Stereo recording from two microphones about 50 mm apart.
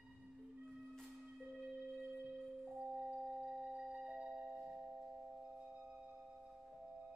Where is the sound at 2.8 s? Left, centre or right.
Centre.